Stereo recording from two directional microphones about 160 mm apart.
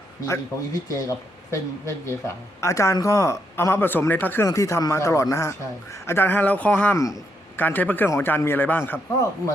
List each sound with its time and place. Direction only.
0.3 s a man's voice: 20° left (ahead or behind)